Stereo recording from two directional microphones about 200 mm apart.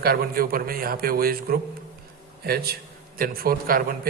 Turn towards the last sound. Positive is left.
turn(degrees=-45)  # may be behind; listen again after turning